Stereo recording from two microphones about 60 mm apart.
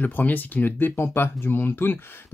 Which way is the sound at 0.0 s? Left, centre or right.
Left.